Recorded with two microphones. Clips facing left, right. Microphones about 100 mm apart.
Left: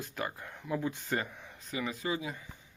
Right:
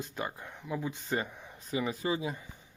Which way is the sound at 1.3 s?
10° right (ahead or behind).